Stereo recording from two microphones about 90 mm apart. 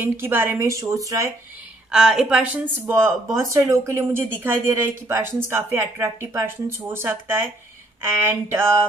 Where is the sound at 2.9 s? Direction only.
30° right (ahead or behind).